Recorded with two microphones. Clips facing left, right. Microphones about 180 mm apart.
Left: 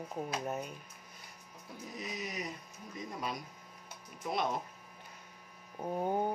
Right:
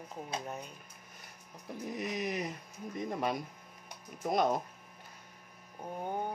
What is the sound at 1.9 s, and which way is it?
Dog, 55° right (ahead or behind).